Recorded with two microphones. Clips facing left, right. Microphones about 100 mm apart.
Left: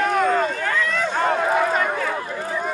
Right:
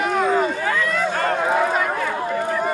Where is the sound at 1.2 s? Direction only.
5° left (ahead or behind).